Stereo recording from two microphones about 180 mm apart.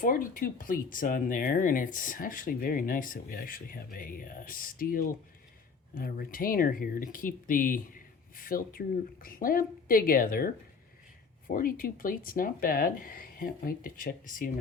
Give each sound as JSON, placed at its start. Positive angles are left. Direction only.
{"t": 0.0, "sound": "speech", "side_deg": 50}